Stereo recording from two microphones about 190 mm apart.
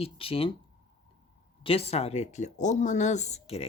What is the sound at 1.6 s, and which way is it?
Speech, 30° left (ahead or behind).